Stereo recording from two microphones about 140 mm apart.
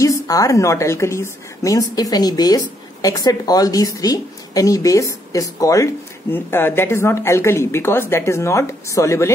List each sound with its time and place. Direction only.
0.0 s a woman's voice: 25° left (ahead or behind)